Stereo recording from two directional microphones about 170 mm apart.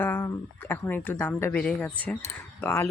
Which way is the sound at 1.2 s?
10° left (ahead or behind).